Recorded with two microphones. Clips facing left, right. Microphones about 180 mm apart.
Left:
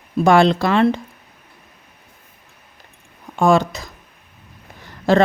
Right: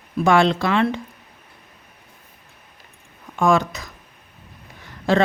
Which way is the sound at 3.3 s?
30° left (ahead or behind).